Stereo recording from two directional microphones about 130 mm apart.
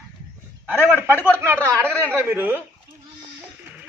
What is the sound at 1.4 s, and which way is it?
A man's voice, 15° right (ahead or behind).